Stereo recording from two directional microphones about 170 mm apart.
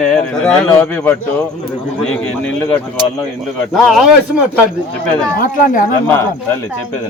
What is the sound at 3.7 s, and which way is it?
Speech, centre (ahead or behind).